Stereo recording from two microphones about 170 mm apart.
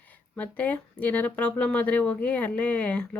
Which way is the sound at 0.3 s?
10° left (ahead or behind).